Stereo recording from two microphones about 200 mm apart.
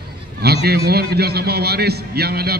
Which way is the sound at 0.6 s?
55° right (ahead or behind).